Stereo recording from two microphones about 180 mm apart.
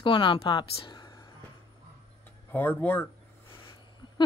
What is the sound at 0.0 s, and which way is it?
Speech, 25° left (ahead or behind).